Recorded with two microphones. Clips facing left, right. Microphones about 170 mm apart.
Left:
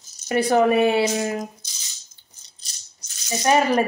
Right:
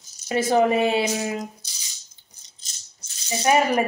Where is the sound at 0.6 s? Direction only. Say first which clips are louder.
Left 2 dB; 20° right (ahead or behind).